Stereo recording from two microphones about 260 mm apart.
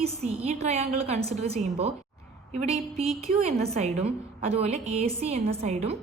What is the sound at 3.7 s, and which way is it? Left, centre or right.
A woman's voice, right.